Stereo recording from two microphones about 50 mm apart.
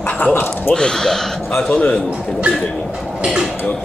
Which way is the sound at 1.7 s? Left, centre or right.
Left.